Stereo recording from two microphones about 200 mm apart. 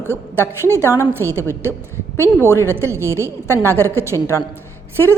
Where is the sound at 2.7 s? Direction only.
10° right (ahead or behind).